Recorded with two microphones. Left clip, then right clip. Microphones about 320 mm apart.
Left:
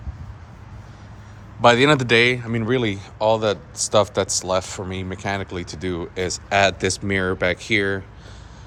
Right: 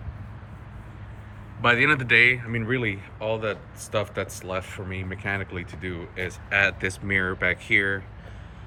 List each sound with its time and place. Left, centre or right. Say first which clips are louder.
1.7 s speech: right 2 dB; centre